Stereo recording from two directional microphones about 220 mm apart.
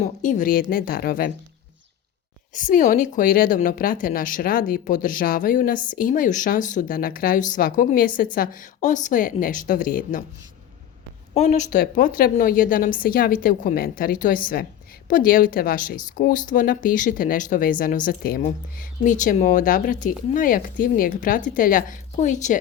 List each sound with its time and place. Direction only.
0.0 s a woman's voice: 35° left (ahead or behind)
2.5 s a woman's voice: 35° left (ahead or behind)
11.3 s a woman's voice: 30° left (ahead or behind)